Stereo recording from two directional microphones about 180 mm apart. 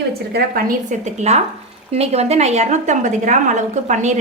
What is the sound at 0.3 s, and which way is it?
A woman's voice, 50° right (ahead or behind).